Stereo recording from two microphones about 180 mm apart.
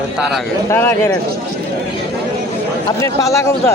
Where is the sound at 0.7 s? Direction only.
15° left (ahead or behind).